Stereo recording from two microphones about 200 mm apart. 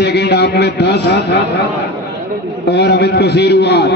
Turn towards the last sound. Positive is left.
turn(degrees=55)  # may be behind; listen again after turning